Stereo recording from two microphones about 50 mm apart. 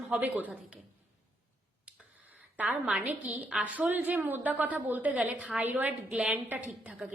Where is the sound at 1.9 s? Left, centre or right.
Right.